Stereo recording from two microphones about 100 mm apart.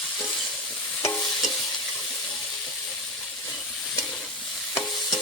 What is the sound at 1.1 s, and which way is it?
Stir, 5° left (ahead or behind).